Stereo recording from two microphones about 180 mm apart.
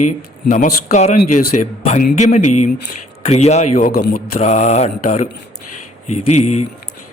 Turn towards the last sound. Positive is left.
turn(degrees=35)  # may be behind; listen again after turning